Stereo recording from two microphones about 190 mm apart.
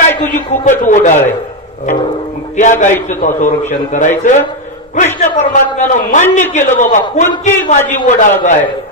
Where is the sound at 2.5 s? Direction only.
40° left (ahead or behind).